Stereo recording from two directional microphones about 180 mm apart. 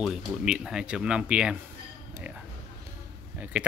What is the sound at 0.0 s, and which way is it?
Speech, 5° right (ahead or behind).